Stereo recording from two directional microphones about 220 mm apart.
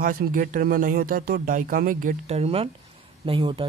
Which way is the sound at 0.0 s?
40° right (ahead or behind).